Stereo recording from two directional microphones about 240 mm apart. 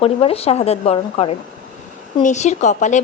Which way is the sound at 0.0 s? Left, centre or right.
Left.